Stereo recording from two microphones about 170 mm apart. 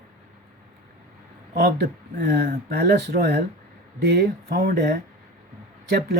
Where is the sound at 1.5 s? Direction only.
65° right (ahead or behind).